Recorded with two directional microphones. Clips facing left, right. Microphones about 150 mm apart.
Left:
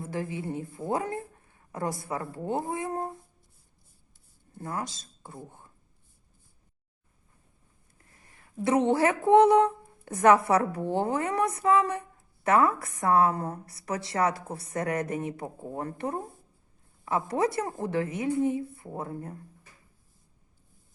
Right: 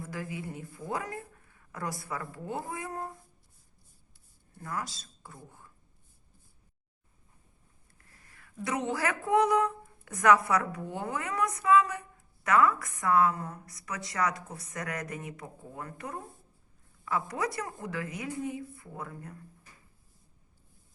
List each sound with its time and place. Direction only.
0.0 s speech: 25° left (ahead or behind)
4.5 s speech: 25° left (ahead or behind)
8.1 s speech: 20° left (ahead or behind)